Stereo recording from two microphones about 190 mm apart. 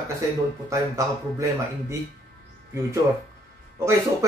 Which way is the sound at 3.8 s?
15° right (ahead or behind).